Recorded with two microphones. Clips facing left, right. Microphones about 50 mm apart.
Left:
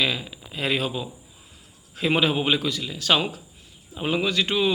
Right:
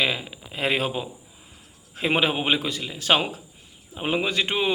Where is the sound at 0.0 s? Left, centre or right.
Right.